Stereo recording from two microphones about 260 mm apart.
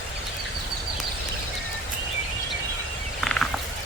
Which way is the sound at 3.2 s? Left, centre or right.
Centre.